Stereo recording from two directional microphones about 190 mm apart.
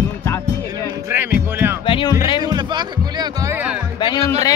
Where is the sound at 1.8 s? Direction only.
25° left (ahead or behind).